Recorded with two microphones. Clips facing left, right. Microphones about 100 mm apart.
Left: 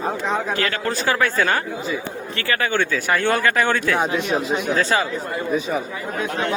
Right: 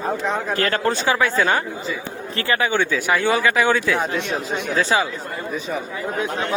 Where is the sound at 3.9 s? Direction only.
Centre (ahead or behind).